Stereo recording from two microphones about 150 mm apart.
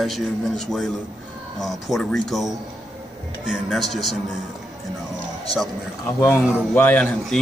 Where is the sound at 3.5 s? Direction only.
Centre (ahead or behind).